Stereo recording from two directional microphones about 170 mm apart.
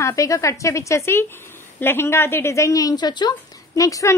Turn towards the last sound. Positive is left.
turn(degrees=20)  # may be behind; listen again after turning